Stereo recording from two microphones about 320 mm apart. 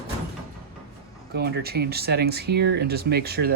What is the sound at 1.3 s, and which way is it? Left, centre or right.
Speech, right.